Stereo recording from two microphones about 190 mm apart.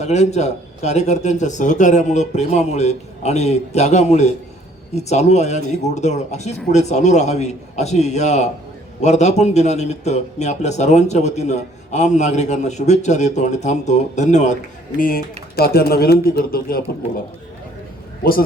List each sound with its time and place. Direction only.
0.0 s a man's voice: 35° left (ahead or behind); by 16.8 s 50° left (ahead or behind)
18.2 s a man's voice: 50° left (ahead or behind)